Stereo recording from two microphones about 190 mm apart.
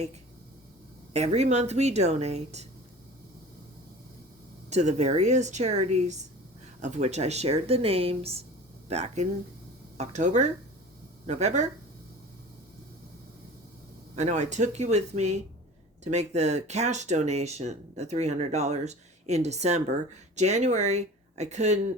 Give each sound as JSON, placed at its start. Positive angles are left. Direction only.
{"t": 1.1, "sound": "speech", "side_deg": -35}
{"t": 4.7, "sound": "speech", "side_deg": -35}
{"t": 14.2, "sound": "speech", "side_deg": -40}